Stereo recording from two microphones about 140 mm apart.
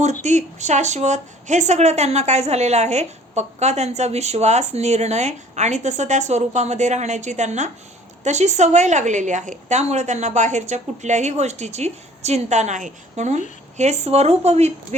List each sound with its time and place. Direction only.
0.0 s a woman's voice: 55° right (ahead or behind)